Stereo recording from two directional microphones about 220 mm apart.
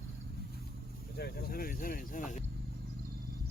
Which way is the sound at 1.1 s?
45° left (ahead or behind).